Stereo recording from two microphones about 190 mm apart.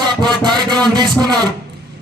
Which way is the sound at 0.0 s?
25° right (ahead or behind).